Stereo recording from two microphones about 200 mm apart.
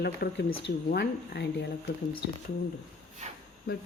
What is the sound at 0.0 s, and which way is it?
A woman's voice, 55° left (ahead or behind).